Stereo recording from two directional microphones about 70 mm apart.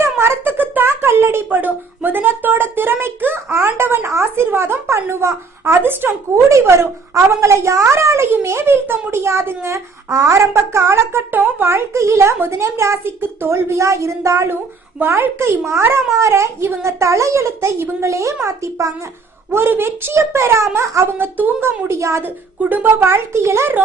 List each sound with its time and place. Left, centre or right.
0.0 s a sound: right
1.5 s a woman's voice: right
5.8 s a woman's voice: right
19.5 s a woman's voice: right
21.1 s speech: right
21.8 s speech: right
22.7 s a woman's voice: right